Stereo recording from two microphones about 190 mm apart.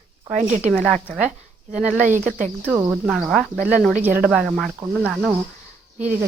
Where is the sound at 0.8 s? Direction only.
5° right (ahead or behind).